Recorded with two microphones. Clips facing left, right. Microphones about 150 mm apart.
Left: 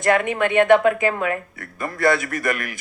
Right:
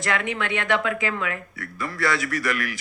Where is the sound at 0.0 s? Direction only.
50° left (ahead or behind).